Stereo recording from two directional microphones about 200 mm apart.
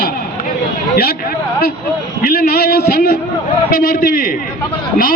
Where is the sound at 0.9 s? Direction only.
50° left (ahead or behind).